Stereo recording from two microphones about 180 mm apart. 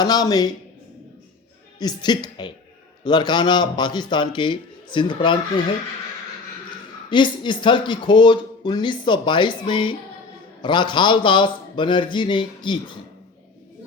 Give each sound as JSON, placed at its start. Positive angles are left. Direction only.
{"t": 0.0, "sound": "speech", "side_deg": 20}
{"t": 1.8, "sound": "speech", "side_deg": 25}
{"t": 7.1, "sound": "speech", "side_deg": 25}